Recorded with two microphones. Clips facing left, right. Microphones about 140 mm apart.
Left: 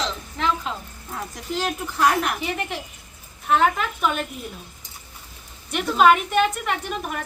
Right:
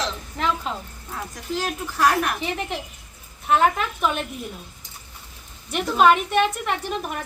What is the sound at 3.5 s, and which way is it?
Speech, centre (ahead or behind).